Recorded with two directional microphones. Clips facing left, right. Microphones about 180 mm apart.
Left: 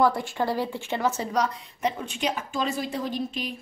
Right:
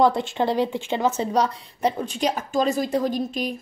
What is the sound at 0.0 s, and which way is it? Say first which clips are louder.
A woman's voice: right 4 dB; 20° right (ahead or behind).